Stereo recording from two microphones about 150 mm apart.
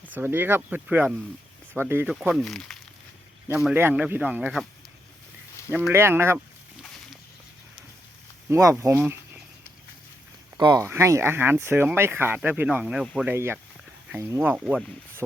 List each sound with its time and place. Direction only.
0.0 s speech: 10° right (ahead or behind)
2.1 s speech: 5° right (ahead or behind)
3.5 s speech: 10° right (ahead or behind)
5.7 s speech: 15° right (ahead or behind)
8.4 s speech: 20° right (ahead or behind)
10.6 s speech: 30° right (ahead or behind)
10.8 s speech: 20° right (ahead or behind)
13.3 s speech: 15° right (ahead or behind)
14.6 s speech: centre (ahead or behind)